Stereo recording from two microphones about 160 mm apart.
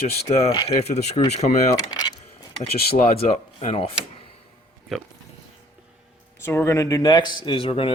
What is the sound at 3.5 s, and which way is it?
Speech, 35° left (ahead or behind).